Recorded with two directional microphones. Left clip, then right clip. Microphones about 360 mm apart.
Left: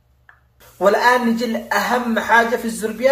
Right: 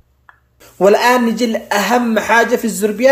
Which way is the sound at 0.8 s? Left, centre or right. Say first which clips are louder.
Right 4 dB; right.